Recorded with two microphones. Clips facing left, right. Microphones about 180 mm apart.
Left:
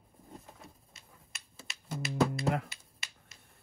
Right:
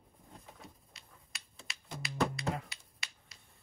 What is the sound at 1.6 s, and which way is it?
Finger snapping, 5° left (ahead or behind).